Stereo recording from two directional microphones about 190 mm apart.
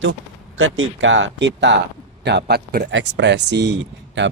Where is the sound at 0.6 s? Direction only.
85° right.